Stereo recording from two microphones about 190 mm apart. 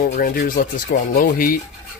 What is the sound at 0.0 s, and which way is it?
Speech, 50° left (ahead or behind).